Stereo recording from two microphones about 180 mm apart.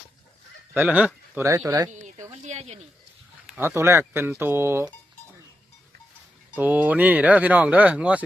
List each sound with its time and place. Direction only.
0.7 s speech: 10° right (ahead or behind)
2.3 s a sound: 40° right (ahead or behind)
3.4 s speech: 10° right (ahead or behind)
6.6 s speech: 10° right (ahead or behind)